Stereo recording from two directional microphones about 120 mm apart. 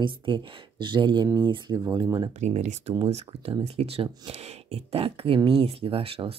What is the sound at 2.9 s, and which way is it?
Speech, 55° right (ahead or behind).